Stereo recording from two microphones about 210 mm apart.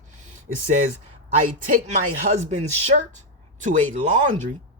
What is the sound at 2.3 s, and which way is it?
Speech, 30° right (ahead or behind).